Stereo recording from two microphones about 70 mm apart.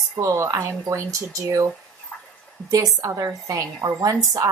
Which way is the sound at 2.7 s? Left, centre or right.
Right.